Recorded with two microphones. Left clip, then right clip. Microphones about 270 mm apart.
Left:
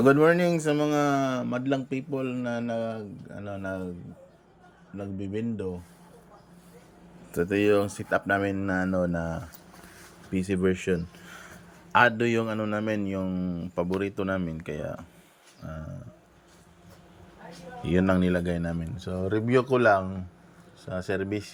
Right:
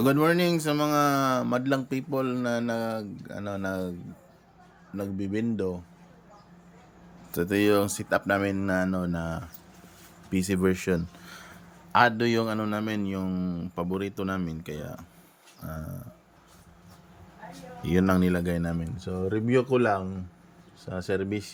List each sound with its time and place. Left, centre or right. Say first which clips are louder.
0.0 s a man's voice: left 3 dB; centre
4.9 s a man's voice: right 2 dB; centre
7.3 s a man's voice: left 1 dB; centre
15.6 s a man's voice: right 1 dB; right
17.8 s a man's voice: even; centre